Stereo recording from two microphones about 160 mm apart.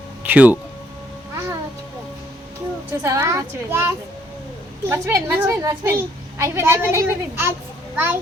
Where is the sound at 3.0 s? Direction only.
20° right (ahead or behind).